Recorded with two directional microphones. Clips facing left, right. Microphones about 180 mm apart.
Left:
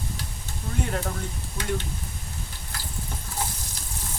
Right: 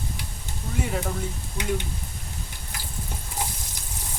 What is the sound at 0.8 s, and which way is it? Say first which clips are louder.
Speech: right 2 dB; 5° right (ahead or behind).